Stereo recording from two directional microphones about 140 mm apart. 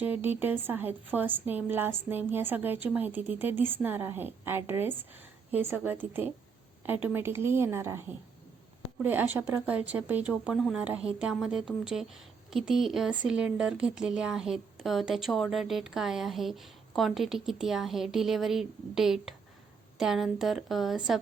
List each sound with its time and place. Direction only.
0.0 s a woman's voice: 15° right (ahead or behind)